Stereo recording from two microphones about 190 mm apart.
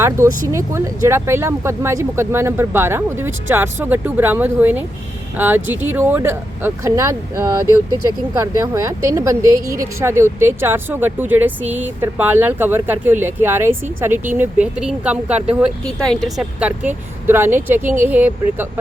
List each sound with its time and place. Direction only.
0.5 s speech: 15° right (ahead or behind)